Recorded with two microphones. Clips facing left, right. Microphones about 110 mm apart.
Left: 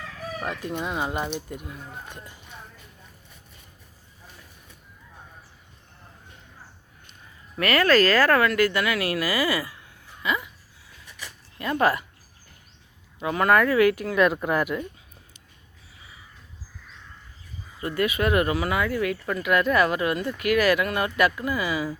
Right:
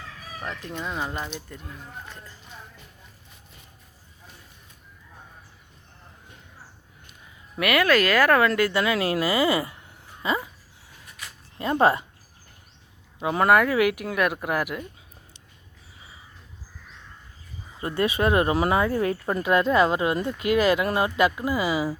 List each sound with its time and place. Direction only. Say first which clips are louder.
0.4 s speech: left 2 dB; 10° left (ahead or behind)
7.1 s speech: even; 10° right (ahead or behind)
10.2 s a sound: right 1 dB; 30° right (ahead or behind)
11.5 s speech: right 2 dB; 25° right (ahead or behind)
13.1 s speech: right 1 dB; 20° right (ahead or behind); by 14.8 s 5° right (ahead or behind)
17.7 s speech: right 1 dB; 25° right (ahead or behind)